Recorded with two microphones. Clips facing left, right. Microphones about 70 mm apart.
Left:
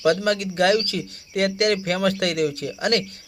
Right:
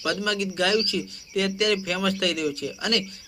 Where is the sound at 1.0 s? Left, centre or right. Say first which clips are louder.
Left 3 dB; left.